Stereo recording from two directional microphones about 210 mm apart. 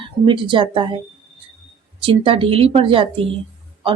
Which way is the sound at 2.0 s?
25° right (ahead or behind).